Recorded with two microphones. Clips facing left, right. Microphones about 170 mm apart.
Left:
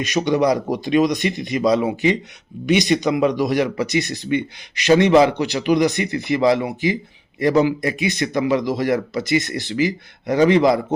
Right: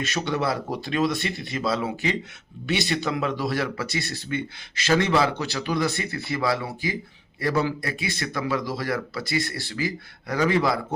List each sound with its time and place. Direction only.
0.0 s a man's voice: 15° left (ahead or behind)